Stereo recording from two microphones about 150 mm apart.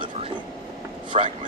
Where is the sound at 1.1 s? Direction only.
40° right (ahead or behind).